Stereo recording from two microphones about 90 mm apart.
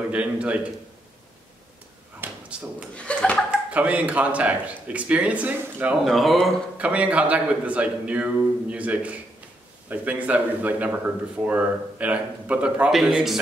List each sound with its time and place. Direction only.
0.1 s speech: 15° right (ahead or behind)
2.2 s a sound: 25° right (ahead or behind)
3.0 s speech: 15° left (ahead or behind)
3.7 s speech: 15° right (ahead or behind)
6.0 s a man's voice: centre (ahead or behind)
6.8 s a man's voice: 15° right (ahead or behind)